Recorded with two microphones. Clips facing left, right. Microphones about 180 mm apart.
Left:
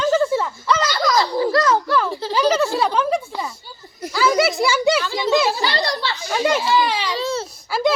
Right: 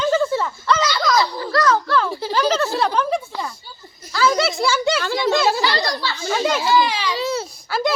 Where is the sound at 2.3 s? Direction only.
10° left (ahead or behind).